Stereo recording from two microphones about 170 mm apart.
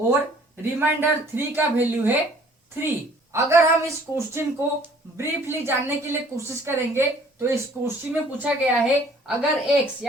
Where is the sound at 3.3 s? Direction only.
15° right (ahead or behind).